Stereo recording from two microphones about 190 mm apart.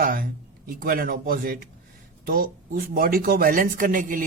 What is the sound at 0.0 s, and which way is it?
A man's voice, 50° right (ahead or behind).